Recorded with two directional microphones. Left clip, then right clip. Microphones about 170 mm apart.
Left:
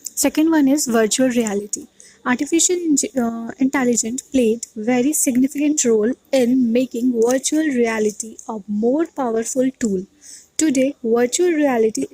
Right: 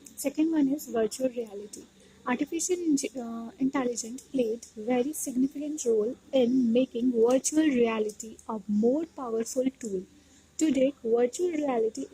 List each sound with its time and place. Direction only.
0.0 s a woman's voice: 45° left (ahead or behind); by 8.6 s 25° left (ahead or behind)
8.9 s speech: 35° left (ahead or behind)